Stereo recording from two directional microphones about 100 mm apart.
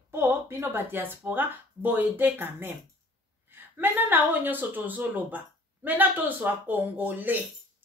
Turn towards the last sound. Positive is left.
turn(degrees=-15)  # may be behind; listen again after turning